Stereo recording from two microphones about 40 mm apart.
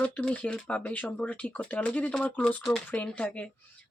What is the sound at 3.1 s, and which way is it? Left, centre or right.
Speech, left.